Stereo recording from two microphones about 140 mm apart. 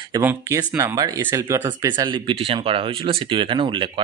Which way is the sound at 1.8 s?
35° right (ahead or behind).